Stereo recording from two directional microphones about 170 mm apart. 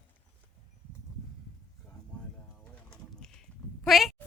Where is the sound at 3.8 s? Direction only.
Centre (ahead or behind).